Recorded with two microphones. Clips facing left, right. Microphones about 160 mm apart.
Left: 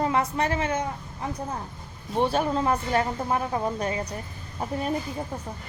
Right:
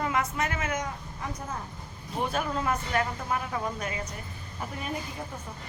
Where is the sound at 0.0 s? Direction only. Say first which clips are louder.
Left 4 dB; 35° left (ahead or behind).